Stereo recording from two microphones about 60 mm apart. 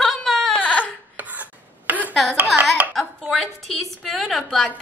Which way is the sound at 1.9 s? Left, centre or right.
Right.